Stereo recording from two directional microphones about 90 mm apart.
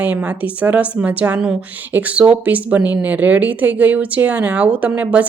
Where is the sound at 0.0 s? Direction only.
15° right (ahead or behind).